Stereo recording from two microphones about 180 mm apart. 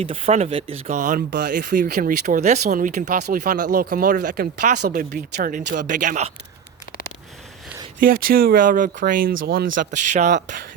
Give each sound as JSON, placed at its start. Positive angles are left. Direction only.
{"t": 0.0, "sound": "speech", "side_deg": -30}
{"t": 7.9, "sound": "speech", "side_deg": -50}
{"t": 9.3, "sound": "speech", "side_deg": -75}